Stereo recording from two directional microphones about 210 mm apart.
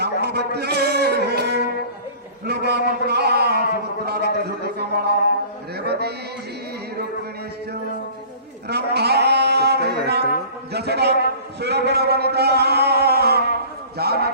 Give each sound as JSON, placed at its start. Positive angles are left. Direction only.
{"t": 0.0, "sound": "a sound", "side_deg": -50}
{"t": 8.7, "sound": "sheep", "side_deg": -50}
{"t": 10.7, "sound": "a man's voice", "side_deg": -50}